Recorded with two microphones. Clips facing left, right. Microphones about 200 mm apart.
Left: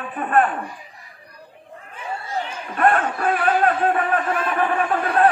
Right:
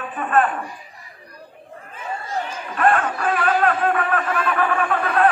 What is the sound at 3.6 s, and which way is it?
A man's voice, 30° left (ahead or behind).